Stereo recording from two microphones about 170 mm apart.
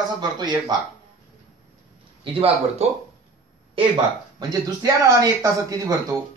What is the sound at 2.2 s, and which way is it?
Speech, 35° right (ahead or behind).